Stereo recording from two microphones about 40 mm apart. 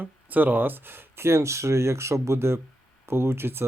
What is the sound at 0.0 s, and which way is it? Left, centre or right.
Speech, right.